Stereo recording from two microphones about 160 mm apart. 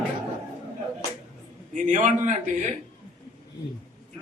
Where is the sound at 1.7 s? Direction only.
50° right (ahead or behind).